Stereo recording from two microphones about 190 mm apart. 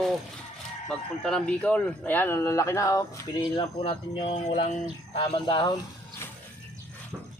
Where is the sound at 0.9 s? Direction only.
5° left (ahead or behind); by 5.2 s 35° left (ahead or behind).